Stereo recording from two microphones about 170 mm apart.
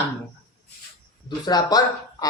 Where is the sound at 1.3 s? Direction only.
25° left (ahead or behind).